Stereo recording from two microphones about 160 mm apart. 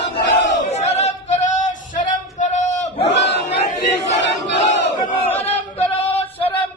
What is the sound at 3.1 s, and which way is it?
Battle cry, 90° left.